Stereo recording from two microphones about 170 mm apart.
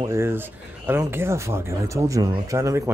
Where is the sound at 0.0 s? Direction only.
15° right (ahead or behind).